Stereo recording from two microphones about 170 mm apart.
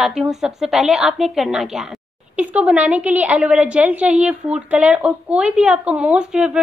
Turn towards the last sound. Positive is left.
turn(degrees=-5)  # may be behind; listen again after turning